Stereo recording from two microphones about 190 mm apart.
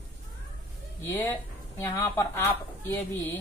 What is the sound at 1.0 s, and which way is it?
Speech, 10° left (ahead or behind).